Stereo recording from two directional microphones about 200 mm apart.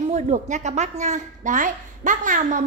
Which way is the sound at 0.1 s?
35° right (ahead or behind).